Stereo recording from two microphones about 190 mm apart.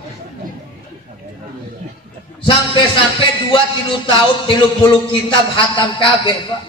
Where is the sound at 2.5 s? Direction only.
25° left (ahead or behind).